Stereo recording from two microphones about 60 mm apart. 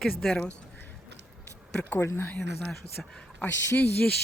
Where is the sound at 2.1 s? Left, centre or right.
Left.